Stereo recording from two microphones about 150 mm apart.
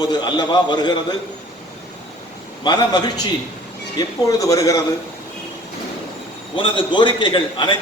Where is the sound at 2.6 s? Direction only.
30° left (ahead or behind).